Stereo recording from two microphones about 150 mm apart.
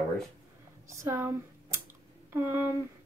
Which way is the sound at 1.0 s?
15° right (ahead or behind).